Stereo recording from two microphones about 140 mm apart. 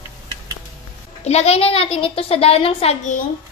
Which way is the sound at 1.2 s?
50° left (ahead or behind).